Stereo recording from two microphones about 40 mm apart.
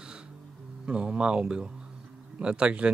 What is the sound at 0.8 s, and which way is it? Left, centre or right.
Speech, right.